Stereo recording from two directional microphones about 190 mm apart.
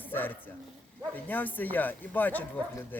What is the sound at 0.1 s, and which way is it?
Speech, 10° left (ahead or behind).